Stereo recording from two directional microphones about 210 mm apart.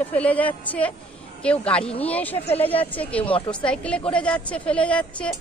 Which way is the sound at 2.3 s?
30° left (ahead or behind).